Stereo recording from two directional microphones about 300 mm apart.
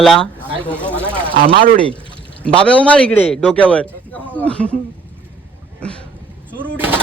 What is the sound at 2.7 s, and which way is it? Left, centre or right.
A man's voice, centre.